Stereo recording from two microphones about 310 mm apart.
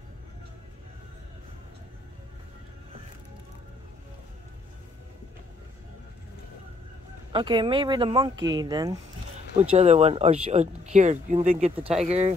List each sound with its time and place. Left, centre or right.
7.3 s speech: centre